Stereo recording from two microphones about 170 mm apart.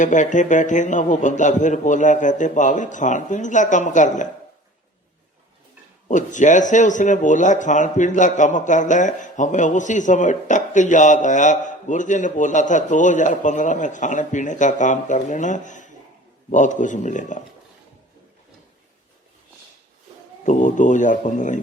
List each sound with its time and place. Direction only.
0.0 s a man's voice: 45° left (ahead or behind)
6.1 s a man's voice: 45° left (ahead or behind)
20.4 s speech: 45° left (ahead or behind)